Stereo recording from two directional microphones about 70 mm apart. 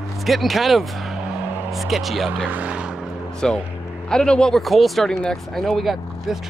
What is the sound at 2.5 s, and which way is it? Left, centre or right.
Speech, centre.